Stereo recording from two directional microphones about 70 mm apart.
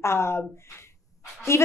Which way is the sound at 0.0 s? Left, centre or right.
Left.